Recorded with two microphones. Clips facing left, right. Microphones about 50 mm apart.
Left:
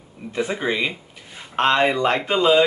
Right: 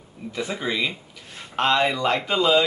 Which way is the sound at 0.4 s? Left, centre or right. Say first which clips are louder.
Left 3 dB; left.